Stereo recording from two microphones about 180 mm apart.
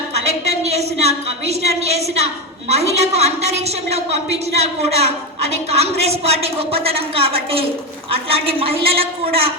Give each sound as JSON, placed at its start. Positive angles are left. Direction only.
{"t": 0.7, "sound": "a woman's voice", "side_deg": -35}